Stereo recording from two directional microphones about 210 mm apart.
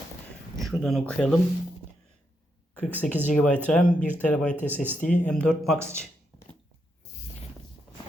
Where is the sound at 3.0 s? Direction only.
35° left (ahead or behind).